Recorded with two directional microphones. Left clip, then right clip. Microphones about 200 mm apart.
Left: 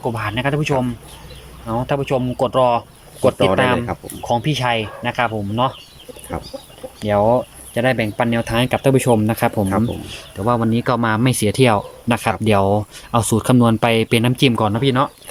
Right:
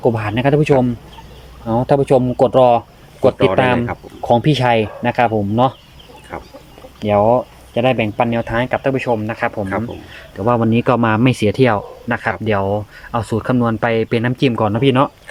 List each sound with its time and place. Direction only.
0.0 s speech: 20° right (ahead or behind)
7.0 s speech: 5° right (ahead or behind); by 9.8 s 15° left (ahead or behind)
10.3 s speech: centre (ahead or behind)